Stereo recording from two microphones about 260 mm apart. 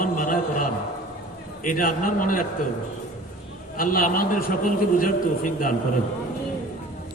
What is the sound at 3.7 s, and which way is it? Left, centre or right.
A man's voice, left.